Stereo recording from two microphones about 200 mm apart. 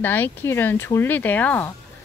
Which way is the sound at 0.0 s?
10° left (ahead or behind).